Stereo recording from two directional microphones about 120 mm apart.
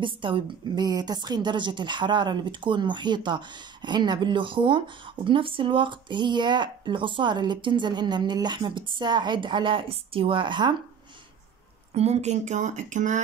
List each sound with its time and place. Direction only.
0.0 s a woman's voice: 45° right (ahead or behind)
11.9 s speech: 65° right (ahead or behind); by 13.2 s 90° right